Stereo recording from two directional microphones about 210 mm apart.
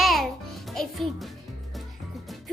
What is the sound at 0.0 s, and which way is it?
Music, centre (ahead or behind).